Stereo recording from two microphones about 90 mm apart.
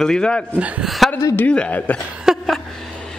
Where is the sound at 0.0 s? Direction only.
10° left (ahead or behind).